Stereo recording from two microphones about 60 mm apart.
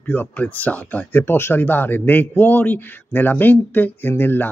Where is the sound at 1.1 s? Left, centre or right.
Left.